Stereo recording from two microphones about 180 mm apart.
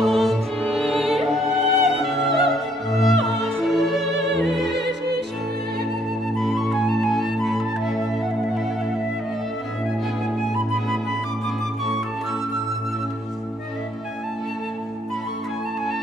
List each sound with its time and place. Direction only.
0.0 s music: centre (ahead or behind)
4.4 s opera: centre (ahead or behind)
4.7 s music: 70° right (ahead or behind)
6.3 s music: centre (ahead or behind)